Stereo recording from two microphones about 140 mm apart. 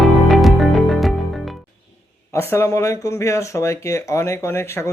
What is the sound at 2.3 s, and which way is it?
Speech, 20° left (ahead or behind).